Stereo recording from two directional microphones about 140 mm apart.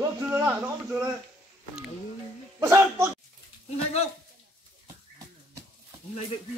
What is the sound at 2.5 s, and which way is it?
Speech, 20° right (ahead or behind).